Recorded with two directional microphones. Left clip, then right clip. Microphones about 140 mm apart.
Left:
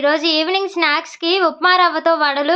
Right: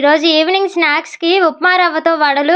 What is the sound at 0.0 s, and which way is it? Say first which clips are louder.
A woman's voice: right 5 dB; 35° right (ahead or behind).